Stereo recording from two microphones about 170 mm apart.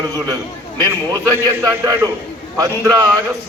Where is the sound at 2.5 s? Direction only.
20° right (ahead or behind).